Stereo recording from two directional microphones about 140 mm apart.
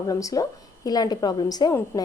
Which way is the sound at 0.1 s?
25° left (ahead or behind).